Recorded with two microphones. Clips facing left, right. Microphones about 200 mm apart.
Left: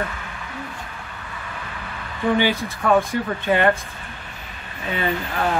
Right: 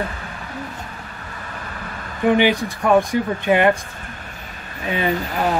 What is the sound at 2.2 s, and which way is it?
Speech, 15° right (ahead or behind).